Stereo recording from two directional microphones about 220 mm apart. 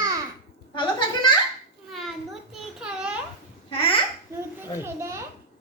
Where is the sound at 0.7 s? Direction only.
20° left (ahead or behind).